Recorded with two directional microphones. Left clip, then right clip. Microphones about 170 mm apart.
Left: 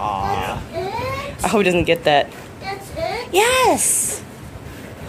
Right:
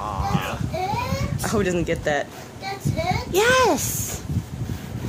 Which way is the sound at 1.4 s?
Centre (ahead or behind).